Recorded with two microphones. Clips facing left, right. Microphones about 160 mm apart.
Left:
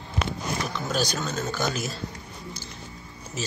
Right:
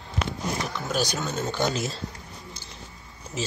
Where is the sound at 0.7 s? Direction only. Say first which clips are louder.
Even; 15° right (ahead or behind).